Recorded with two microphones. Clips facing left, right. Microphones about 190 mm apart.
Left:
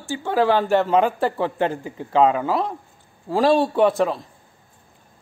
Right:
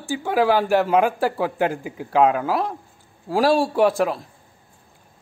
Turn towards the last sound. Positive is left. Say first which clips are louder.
# even
turn(degrees=-10)  # may be behind; listen again after turning